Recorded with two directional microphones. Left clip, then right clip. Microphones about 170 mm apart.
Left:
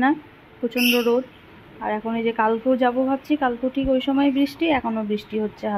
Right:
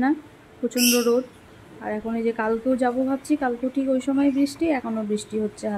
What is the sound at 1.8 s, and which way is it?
Speech, 5° right (ahead or behind).